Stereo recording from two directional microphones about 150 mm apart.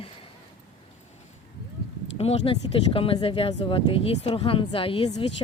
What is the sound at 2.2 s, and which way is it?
Speech, 40° left (ahead or behind).